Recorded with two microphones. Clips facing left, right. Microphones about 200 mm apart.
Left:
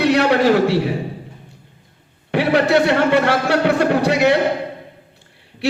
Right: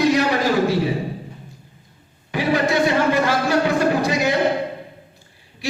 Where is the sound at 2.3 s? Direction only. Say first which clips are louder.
Left 4 dB; 65° left (ahead or behind).